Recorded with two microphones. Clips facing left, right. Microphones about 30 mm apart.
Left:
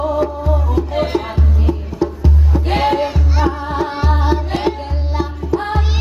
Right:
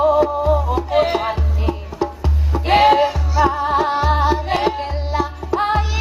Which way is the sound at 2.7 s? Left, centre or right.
Right.